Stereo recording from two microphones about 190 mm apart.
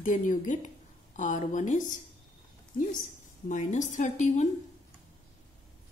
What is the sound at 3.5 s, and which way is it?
Speech, 40° left (ahead or behind).